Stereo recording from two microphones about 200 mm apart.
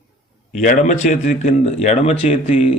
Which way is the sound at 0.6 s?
40° left (ahead or behind).